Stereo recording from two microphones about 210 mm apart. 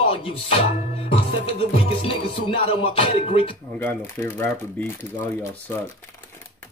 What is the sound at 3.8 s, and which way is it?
Speech, 10° left (ahead or behind).